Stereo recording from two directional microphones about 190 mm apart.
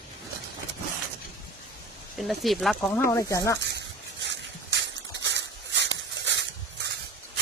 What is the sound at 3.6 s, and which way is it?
Dog, 65° right (ahead or behind).